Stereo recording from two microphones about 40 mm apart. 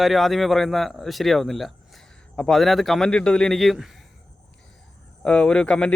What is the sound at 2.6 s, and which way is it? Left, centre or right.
Speech, centre.